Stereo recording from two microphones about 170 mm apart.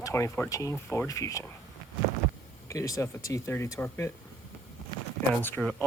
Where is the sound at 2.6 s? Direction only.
20° left (ahead or behind).